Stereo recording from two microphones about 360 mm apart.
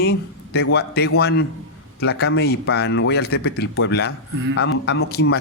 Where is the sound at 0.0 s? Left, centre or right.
Left.